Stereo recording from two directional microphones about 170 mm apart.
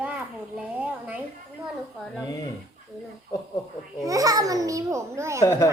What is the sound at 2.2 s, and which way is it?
Speech, 20° left (ahead or behind).